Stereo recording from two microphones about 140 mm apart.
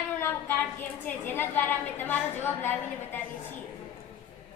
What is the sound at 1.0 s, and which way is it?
A woman's voice, 15° left (ahead or behind).